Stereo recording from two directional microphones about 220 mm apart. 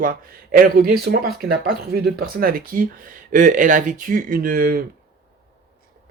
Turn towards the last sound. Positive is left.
turn(degrees=-40)  # may be behind; listen again after turning